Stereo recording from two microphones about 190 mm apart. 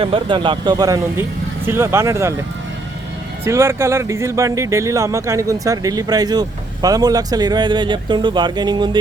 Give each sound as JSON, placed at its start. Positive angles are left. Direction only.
{"t": 0.0, "sound": "speech", "side_deg": -25}
{"t": 3.4, "sound": "speech", "side_deg": -15}